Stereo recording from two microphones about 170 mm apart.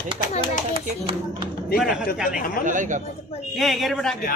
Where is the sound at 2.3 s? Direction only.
55° left (ahead or behind).